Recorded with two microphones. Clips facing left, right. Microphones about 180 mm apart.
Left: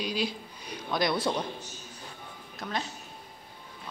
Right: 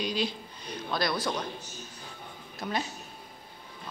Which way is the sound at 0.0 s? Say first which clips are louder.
Even; 5° left (ahead or behind).